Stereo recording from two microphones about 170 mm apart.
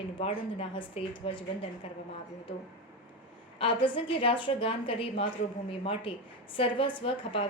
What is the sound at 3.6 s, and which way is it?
A woman's voice, 30° left (ahead or behind).